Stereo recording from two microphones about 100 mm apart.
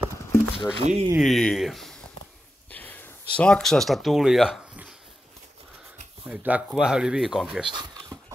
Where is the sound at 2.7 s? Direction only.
15° left (ahead or behind); by 4.6 s 5° right (ahead or behind).